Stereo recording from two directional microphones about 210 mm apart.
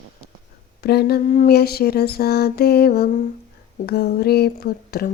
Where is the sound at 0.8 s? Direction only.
50° left (ahead or behind).